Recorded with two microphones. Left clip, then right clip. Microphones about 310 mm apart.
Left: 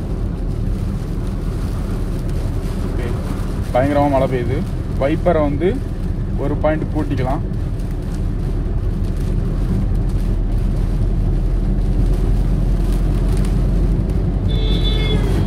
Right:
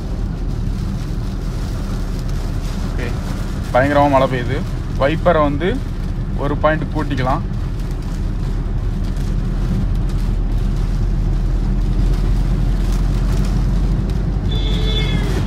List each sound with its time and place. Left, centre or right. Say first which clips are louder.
3.8 s speech: right 3 dB; right